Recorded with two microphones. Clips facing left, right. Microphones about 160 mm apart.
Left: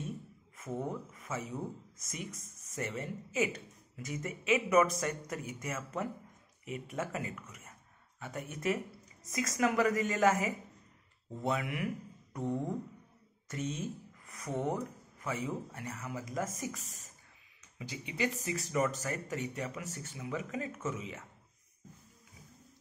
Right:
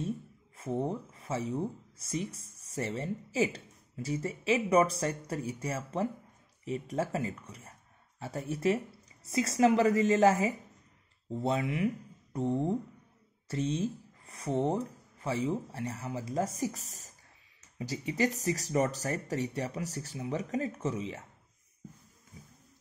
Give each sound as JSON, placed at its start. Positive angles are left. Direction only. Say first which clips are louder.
{"t": 0.6, "sound": "speech", "louder": "right 5 dB", "side_deg": -30}